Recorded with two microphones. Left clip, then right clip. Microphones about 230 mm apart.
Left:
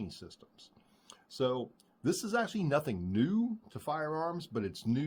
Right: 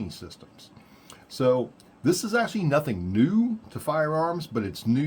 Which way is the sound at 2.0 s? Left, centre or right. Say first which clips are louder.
Right 8 dB; left.